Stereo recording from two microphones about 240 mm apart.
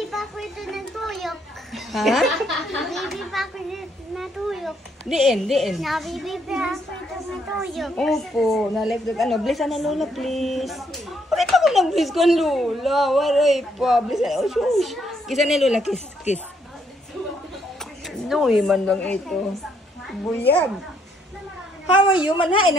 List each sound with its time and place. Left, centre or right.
0.1 s a child's voice: centre
18.0 s a woman's voice: centre
22.4 s speech: left